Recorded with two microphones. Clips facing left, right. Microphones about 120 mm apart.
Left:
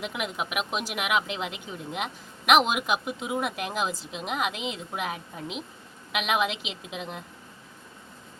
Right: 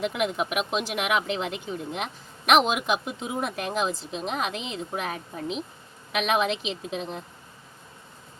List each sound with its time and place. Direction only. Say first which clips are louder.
0.0 s speech: right 5 dB; 35° right (ahead or behind)